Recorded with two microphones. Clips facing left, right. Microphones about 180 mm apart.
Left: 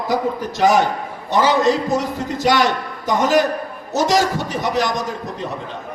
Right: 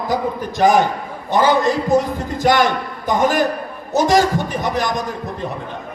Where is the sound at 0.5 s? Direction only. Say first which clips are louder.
Right 2 dB; 50° right (ahead or behind).